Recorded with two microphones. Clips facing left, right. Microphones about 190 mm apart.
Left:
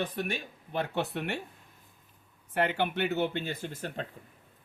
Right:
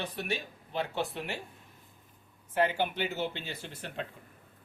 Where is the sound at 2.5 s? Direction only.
65° left (ahead or behind); by 4.0 s 45° left (ahead or behind).